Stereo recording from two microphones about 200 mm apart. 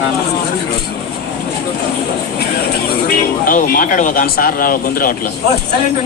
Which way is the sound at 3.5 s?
45° left (ahead or behind).